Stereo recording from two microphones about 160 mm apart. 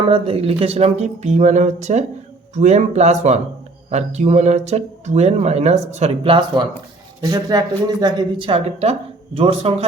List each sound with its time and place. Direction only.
0.1 s speech: 35° right (ahead or behind)
7.2 s speech: 20° right (ahead or behind); by 9.8 s 40° right (ahead or behind)